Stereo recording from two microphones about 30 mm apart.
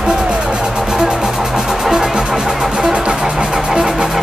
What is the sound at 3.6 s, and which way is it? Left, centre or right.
Vehicle, right.